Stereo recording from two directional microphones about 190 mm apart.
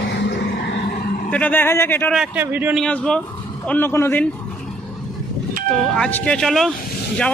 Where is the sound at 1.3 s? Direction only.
10° left (ahead or behind).